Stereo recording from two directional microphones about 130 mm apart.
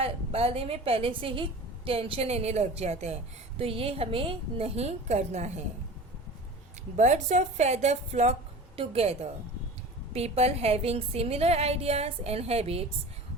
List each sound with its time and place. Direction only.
0.0 s a woman's voice: 50° right (ahead or behind)
6.9 s a woman's voice: 65° right (ahead or behind); by 12.8 s 50° right (ahead or behind)